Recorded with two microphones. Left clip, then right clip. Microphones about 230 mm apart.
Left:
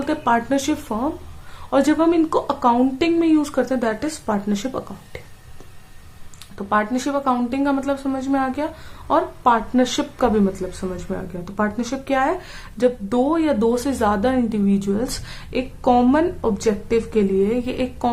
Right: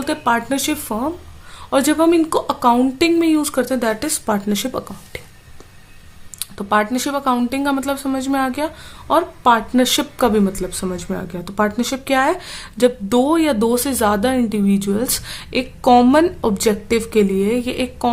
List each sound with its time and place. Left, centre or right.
0.0 s speech: right
6.4 s speech: right